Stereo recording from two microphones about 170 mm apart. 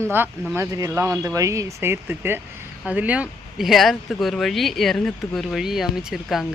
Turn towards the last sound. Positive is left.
turn(degrees=0)  # may be behind; listen again after turning